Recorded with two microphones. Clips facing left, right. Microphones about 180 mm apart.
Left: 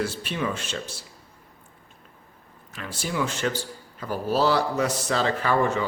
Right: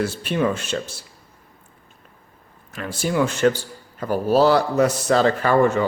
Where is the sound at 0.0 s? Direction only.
50° right (ahead or behind).